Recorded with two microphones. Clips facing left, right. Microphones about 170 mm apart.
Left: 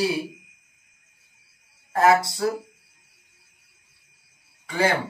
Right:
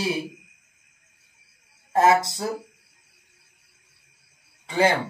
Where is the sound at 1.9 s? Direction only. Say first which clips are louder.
Even; 25° right (ahead or behind).